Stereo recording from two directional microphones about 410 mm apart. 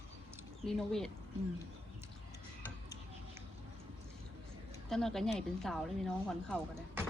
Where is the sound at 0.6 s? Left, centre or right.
Centre.